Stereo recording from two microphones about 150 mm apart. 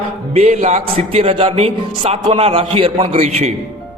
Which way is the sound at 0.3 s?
50° right (ahead or behind).